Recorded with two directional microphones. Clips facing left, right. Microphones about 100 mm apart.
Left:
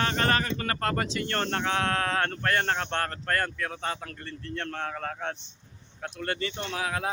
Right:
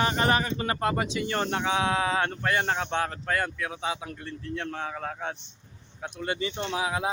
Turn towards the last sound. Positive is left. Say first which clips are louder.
# right 2 dB
turn(degrees=-15)  # may be behind; listen again after turning